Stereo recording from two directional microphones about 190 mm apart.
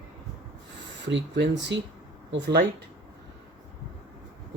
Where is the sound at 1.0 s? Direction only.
70° right (ahead or behind).